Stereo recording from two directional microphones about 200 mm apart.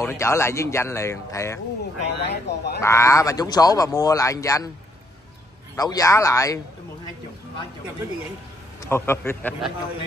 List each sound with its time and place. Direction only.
0.0 s speech: 15° left (ahead or behind)
2.2 s speech: 55° left (ahead or behind)
2.8 s speech: 15° left (ahead or behind)
5.8 s speech: 15° left (ahead or behind)
8.8 s speech: 10° left (ahead or behind)